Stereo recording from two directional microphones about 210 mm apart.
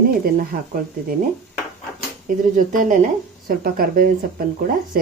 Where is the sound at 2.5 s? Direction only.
40° right (ahead or behind).